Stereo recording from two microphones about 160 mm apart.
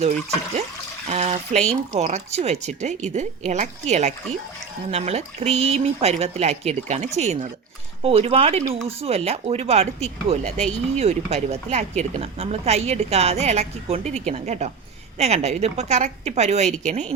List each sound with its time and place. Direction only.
1.0 s speech: 45° right (ahead or behind)